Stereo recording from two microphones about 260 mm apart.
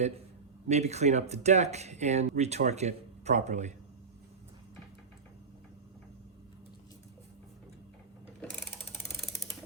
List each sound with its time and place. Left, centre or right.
0.7 s speech: right